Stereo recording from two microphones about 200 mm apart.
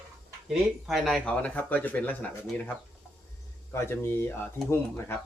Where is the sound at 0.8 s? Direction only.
Centre (ahead or behind).